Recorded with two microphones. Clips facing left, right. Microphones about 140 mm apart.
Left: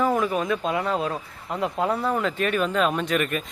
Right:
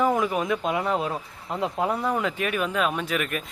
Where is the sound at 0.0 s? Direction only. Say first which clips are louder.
Even; 15° right (ahead or behind).